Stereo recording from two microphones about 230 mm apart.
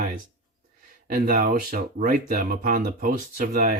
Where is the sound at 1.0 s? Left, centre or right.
Right.